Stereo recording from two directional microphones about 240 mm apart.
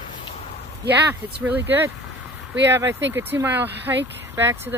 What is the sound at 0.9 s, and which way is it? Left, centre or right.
Speech, centre.